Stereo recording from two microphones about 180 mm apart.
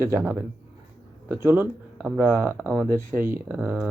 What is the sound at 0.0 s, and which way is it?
Speech, 10° right (ahead or behind).